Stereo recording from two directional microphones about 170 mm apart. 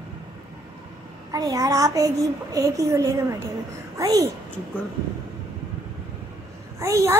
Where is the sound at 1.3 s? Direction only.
20° right (ahead or behind).